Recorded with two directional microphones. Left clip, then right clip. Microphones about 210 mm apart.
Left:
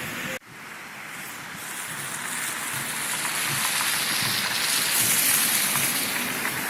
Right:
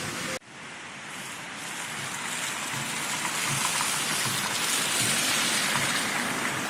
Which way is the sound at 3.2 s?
50° right (ahead or behind).